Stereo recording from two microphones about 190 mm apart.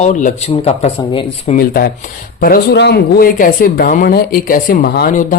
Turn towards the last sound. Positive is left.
turn(degrees=45)  # may be behind; listen again after turning